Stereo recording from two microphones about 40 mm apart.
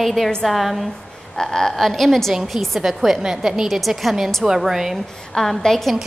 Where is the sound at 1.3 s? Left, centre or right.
Centre.